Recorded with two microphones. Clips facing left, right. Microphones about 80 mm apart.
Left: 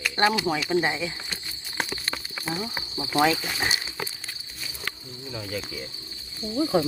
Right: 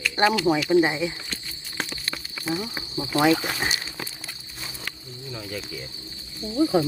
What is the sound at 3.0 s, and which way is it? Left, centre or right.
Speech, centre.